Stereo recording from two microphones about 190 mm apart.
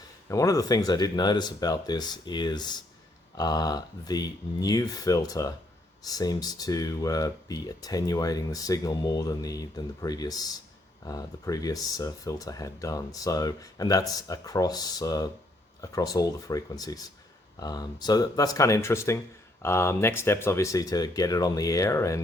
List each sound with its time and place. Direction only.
0.3 s speech: 15° left (ahead or behind)